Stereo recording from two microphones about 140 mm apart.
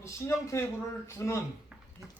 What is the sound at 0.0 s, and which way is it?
A man's voice, 20° left (ahead or behind).